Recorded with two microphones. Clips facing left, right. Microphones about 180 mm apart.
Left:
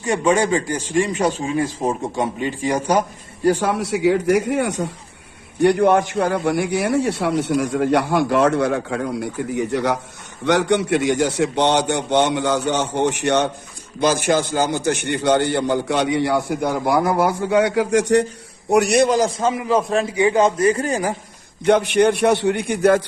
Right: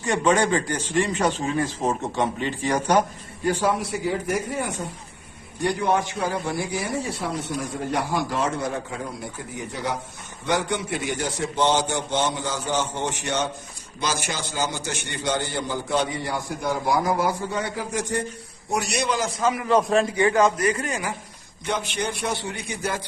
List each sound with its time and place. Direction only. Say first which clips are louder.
0.0 s speech: left 3 dB; 10° left (ahead or behind)
3.6 s a man's voice: left 5 dB; 70° left (ahead or behind)
5.5 s a man's voice: left 8 dB; 65° left (ahead or behind)
14.0 s a man's voice: left 11 dB; 55° left (ahead or behind); by 18.3 s 80° left
18.7 s a man's voice: left 10 dB; 60° left (ahead or behind); by 19.3 s 45° left (ahead or behind)
19.3 s a man's voice: left 3 dB; 25° left (ahead or behind)
19.6 s a man's voice: right 2 dB; centre (ahead or behind)
20.1 s a man's voice: left 3 dB; 20° left (ahead or behind); by 21.2 s 35° left (ahead or behind)
21.6 s a man's voice: left 13 dB; 65° left (ahead or behind)